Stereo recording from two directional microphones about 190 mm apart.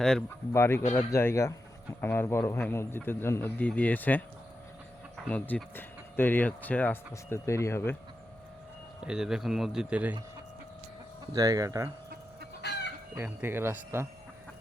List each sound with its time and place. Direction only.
0.5 s speech: 15° left (ahead or behind)
5.3 s speech: 10° left (ahead or behind)
9.0 s a man's voice: 5° right (ahead or behind)
11.3 s speech: 20° right (ahead or behind)
12.6 s chicken: 60° left (ahead or behind)
13.1 s speech: 10° right (ahead or behind)